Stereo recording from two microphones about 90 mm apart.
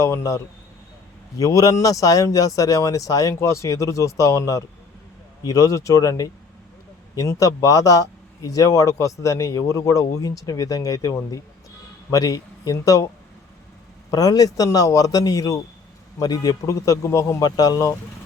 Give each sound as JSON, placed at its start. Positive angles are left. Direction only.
{"t": 0.0, "sound": "speech", "side_deg": 35}
{"t": 14.1, "sound": "speech", "side_deg": 45}